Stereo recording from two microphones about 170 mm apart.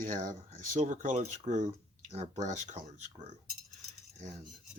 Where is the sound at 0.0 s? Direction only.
50° right (ahead or behind).